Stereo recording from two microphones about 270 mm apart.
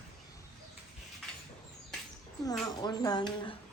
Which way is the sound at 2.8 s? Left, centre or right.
Centre.